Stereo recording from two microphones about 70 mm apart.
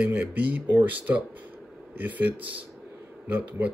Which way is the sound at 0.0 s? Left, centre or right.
Right.